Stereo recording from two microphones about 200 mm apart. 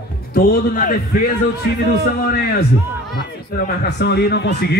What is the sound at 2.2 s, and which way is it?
A man's voice, 50° left (ahead or behind).